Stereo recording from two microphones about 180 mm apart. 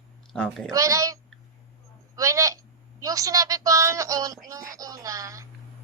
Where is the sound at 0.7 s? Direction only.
20° right (ahead or behind).